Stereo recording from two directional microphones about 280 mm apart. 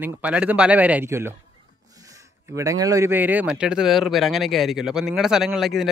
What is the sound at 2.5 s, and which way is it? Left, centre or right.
Speech, centre.